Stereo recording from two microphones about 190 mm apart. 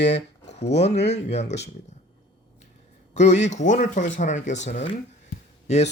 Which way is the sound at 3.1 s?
35° left (ahead or behind).